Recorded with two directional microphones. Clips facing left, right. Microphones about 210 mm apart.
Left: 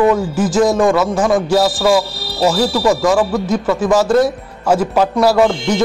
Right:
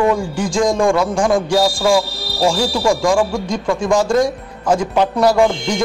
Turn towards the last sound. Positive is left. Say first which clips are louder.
# left 1 dB
turn(degrees=5)  # may be behind; listen again after turning